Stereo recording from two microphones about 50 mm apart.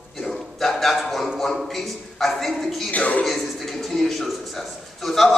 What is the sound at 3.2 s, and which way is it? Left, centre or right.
A man's voice, centre.